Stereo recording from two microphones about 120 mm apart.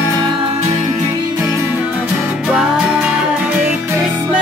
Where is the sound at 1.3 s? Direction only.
20° right (ahead or behind).